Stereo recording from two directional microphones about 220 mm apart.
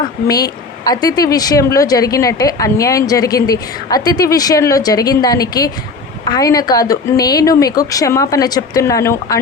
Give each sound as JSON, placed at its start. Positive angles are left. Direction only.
{"t": 0.3, "sound": "speech", "side_deg": 15}